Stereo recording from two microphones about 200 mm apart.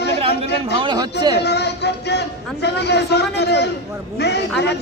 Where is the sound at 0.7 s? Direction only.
25° right (ahead or behind).